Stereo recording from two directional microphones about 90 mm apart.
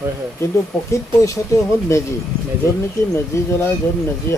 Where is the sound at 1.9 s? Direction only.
35° left (ahead or behind).